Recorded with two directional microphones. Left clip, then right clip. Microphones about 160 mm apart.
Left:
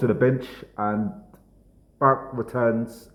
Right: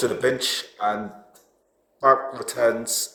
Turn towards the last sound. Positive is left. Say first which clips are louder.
# right 3 dB
turn(degrees=-15)  # may be behind; listen again after turning